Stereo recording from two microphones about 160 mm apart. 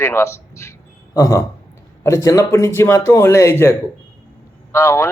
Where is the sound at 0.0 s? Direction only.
15° left (ahead or behind).